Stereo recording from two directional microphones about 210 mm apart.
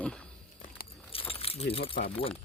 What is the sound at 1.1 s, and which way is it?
Keys jangling, 25° left (ahead or behind).